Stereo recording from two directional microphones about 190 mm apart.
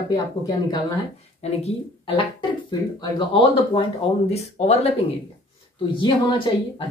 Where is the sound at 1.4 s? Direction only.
30° left (ahead or behind).